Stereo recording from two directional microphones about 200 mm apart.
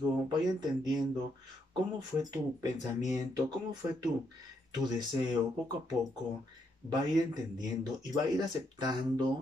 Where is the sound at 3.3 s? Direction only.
20° right (ahead or behind).